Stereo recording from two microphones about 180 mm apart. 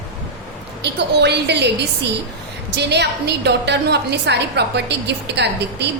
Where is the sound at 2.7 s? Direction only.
70° right (ahead or behind).